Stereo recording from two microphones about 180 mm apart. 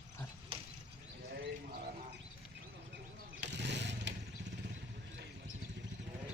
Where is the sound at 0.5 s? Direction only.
30° right (ahead or behind).